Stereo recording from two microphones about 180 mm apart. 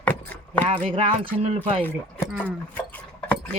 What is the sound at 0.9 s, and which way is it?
Speech, 35° right (ahead or behind).